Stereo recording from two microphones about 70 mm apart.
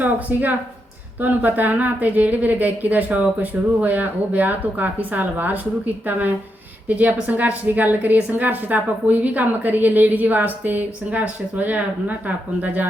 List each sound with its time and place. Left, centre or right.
0.0 s a woman's voice: right